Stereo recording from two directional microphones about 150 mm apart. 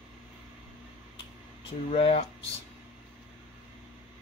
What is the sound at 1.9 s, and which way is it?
Speech, 45° left (ahead or behind).